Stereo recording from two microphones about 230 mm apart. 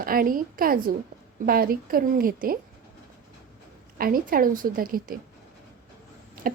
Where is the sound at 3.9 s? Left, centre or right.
Right.